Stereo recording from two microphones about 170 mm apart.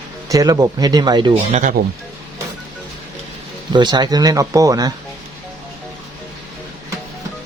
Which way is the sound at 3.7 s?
25° right (ahead or behind).